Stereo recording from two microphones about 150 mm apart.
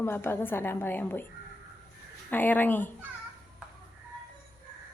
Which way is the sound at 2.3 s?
10° left (ahead or behind).